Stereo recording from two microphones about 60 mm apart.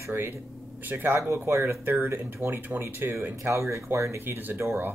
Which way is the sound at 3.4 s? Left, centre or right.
Right.